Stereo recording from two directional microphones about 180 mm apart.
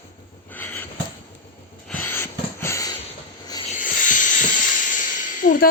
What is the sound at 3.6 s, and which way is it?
Hiss, 45° left (ahead or behind).